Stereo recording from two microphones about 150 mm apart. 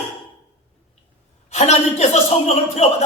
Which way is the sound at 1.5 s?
45° left (ahead or behind).